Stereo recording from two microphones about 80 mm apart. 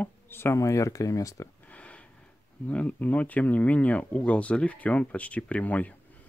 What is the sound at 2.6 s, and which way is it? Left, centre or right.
Speech, centre.